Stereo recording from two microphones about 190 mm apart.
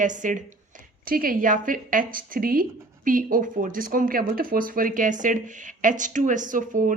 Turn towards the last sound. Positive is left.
turn(degrees=-45)  # may be behind; listen again after turning